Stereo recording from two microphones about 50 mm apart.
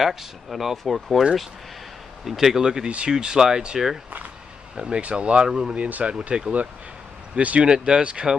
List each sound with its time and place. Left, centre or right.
0.0 s speech: centre
2.2 s speech: centre
5.8 s speech: right